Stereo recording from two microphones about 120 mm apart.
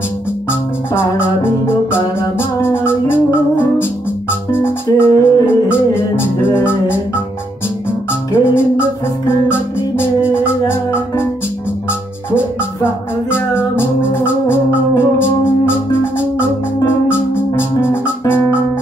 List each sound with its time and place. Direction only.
0.5 s music: 20° left (ahead or behind)
8.1 s music: 20° left (ahead or behind)
10.3 s music: 20° left (ahead or behind)
12.8 s music: 20° left (ahead or behind)